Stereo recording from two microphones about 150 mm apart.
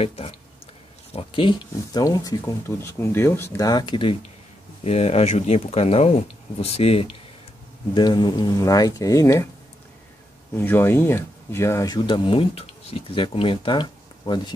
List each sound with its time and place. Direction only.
0.0 s speech: 40° left (ahead or behind)
4.8 s speech: 45° left (ahead or behind)
7.9 s speech: 30° left (ahead or behind)
10.5 s speech: 15° left (ahead or behind); by 14.5 s 30° left (ahead or behind)